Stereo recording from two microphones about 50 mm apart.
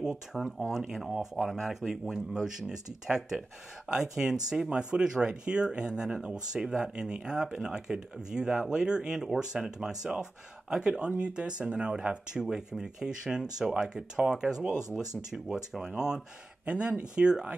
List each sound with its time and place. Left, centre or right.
0.3 s speech: centre
16.6 s speech: right